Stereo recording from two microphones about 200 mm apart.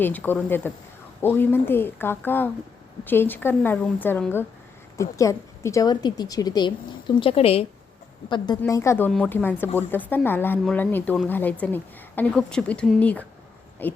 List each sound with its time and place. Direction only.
0.0 s a woman's voice: 10° left (ahead or behind); by 7.7 s 30° left (ahead or behind)
8.3 s a woman's voice: 20° left (ahead or behind)